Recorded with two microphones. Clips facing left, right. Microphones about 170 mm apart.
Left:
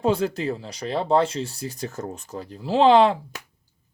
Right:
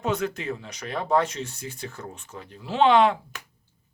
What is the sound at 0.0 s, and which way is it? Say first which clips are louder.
Speech: left 5 dB; 30° left (ahead or behind).